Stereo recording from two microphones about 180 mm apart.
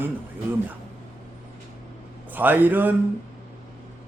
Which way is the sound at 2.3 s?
10° right (ahead or behind).